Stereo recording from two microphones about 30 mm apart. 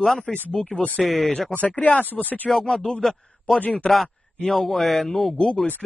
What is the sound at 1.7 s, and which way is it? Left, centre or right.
Speech, left.